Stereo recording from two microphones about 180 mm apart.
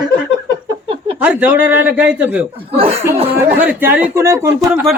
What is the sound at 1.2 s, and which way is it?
Speech, 10° right (ahead or behind).